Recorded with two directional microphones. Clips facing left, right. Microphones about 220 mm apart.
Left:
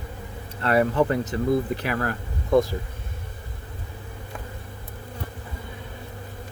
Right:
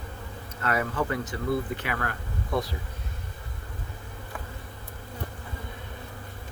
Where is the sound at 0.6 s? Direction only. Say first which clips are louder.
Left 7 dB; 35° left (ahead or behind).